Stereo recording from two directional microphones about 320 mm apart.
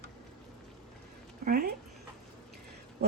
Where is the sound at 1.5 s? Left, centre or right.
Right.